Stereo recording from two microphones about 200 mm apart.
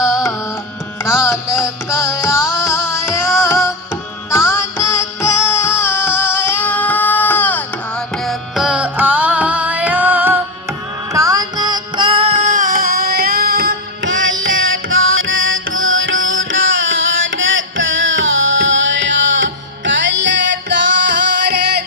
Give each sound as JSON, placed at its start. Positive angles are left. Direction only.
{"t": 0.1, "sound": "carnatic music", "side_deg": 15}
{"t": 1.0, "sound": "music", "side_deg": 15}
{"t": 1.9, "sound": "carnatic music", "side_deg": 15}
{"t": 4.3, "sound": "music", "side_deg": 15}
{"t": 5.8, "sound": "child singing", "side_deg": 10}